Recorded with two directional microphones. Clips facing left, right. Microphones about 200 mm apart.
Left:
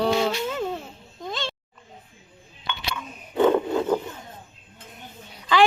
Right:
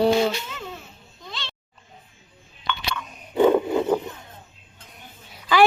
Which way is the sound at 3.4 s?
10° right (ahead or behind).